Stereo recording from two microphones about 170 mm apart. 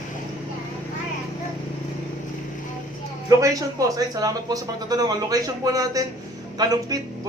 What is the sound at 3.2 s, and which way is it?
Speech, 20° right (ahead or behind).